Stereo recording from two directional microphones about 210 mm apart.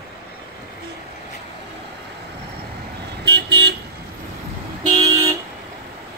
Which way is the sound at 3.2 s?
55° right (ahead or behind).